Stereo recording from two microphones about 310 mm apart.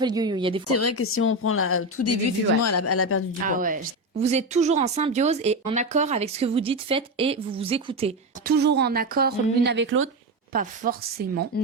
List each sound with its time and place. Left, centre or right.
0.0 s speech: centre
0.7 s speech: left
3.4 s speech: right
8.5 s a woman's voice: right
10.5 s a woman's voice: right
11.5 s speech: left